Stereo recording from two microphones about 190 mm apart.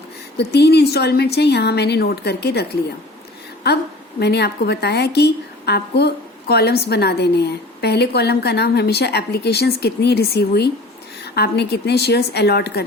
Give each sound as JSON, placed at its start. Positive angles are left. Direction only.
{"t": 0.3, "sound": "a woman's voice", "side_deg": 60}
{"t": 4.2, "sound": "a woman's voice", "side_deg": 60}